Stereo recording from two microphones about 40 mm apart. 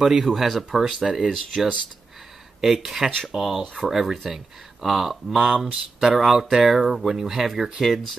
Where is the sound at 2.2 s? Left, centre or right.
Centre.